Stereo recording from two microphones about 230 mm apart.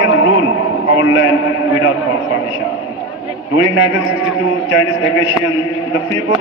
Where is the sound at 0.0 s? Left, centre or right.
Left.